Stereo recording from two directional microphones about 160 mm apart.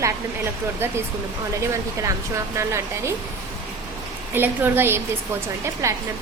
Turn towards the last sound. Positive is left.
turn(degrees=-20)  # may be behind; listen again after turning